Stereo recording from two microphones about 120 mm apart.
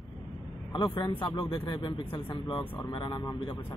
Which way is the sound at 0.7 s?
40° left (ahead or behind).